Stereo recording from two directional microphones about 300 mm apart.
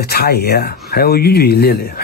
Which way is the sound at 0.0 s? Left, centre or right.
Left.